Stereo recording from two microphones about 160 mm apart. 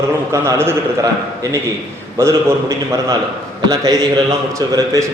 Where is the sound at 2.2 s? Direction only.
15° right (ahead or behind).